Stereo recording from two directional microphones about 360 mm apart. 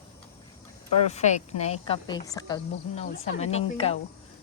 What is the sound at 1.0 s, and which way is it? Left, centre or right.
A woman's voice, centre.